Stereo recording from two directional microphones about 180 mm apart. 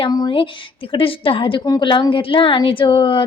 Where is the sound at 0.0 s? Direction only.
25° left (ahead or behind).